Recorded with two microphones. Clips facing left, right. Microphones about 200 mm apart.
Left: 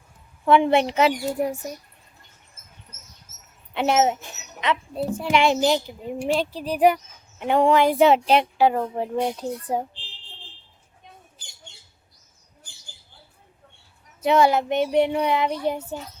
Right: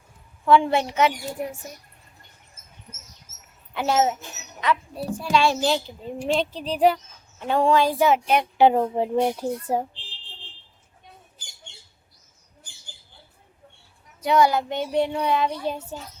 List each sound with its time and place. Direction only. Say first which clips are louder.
0.4 s a child's voice: left 1 dB; 20° left (ahead or behind)
2.9 s rodents: right 6 dB; 10° right (ahead or behind)
3.8 s a child's voice: left 2 dB; 20° left (ahead or behind)
8.5 s a woman's voice: right 3 dB; 20° right (ahead or behind)
14.2 s a child's voice: left 1 dB; 25° left (ahead or behind)